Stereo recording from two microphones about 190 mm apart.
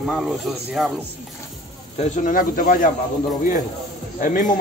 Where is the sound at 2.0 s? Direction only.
45° left (ahead or behind).